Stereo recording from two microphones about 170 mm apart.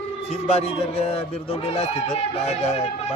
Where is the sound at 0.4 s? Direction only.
35° left (ahead or behind).